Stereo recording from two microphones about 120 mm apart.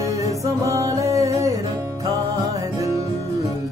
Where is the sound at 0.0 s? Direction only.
25° right (ahead or behind).